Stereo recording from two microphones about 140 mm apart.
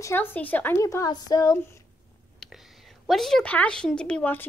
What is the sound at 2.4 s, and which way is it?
A woman's voice, centre (ahead or behind).